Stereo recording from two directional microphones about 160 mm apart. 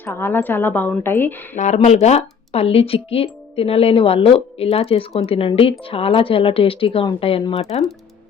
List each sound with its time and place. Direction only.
0.0 s a woman's voice: 15° left (ahead or behind)
1.5 s speech: 45° left (ahead or behind)